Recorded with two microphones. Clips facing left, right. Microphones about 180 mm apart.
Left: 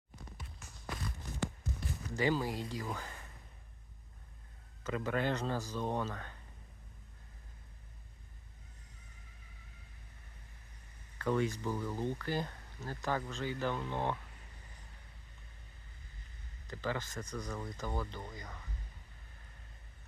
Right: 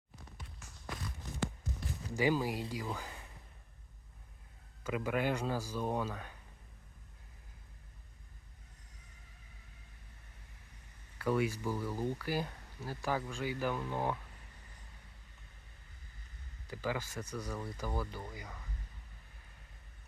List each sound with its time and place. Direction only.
2.1 s speech: 10° right (ahead or behind)
4.8 s speech: 10° right (ahead or behind)
11.2 s speech: 10° right (ahead or behind)
16.6 s speech: 10° right (ahead or behind)